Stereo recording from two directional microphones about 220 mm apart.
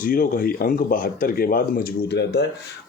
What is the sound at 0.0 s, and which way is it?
Speech, 40° left (ahead or behind).